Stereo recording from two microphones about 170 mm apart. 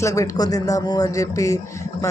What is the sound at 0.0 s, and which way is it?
A man's voice, 20° left (ahead or behind).